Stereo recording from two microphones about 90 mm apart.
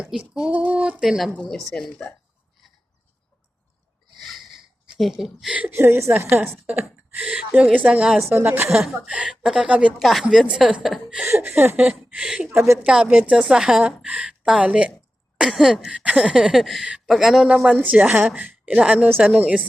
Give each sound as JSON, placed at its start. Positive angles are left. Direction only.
{"t": 0.0, "sound": "a woman's voice", "side_deg": -10}
{"t": 1.5, "sound": "a sound", "side_deg": 0}
{"t": 4.2, "sound": "sniff", "side_deg": 0}
{"t": 5.7, "sound": "a woman's voice", "side_deg": -25}
{"t": 7.3, "sound": "a woman's voice", "side_deg": -10}
{"t": 8.3, "sound": "a woman's voice", "side_deg": -25}
{"t": 8.7, "sound": "a woman's voice", "side_deg": -5}
{"t": 10.0, "sound": "a sound", "side_deg": 0}
{"t": 11.4, "sound": "a woman's voice", "side_deg": -25}
{"t": 11.8, "sound": "a woman's voice", "side_deg": -10}
{"t": 12.5, "sound": "a woman's voice", "side_deg": -30}
{"t": 12.8, "sound": "a woman's voice", "side_deg": -10}
{"t": 15.4, "sound": "a sound", "side_deg": -5}
{"t": 17.5, "sound": "a woman's voice", "side_deg": -10}